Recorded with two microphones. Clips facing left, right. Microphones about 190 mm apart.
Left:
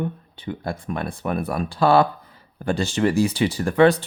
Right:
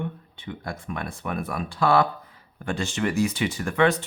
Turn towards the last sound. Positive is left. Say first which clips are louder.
# left 6 dB
turn(degrees=35)  # may be behind; listen again after turning